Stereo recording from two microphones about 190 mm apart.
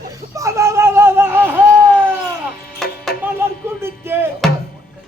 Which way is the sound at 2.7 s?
Centre (ahead or behind).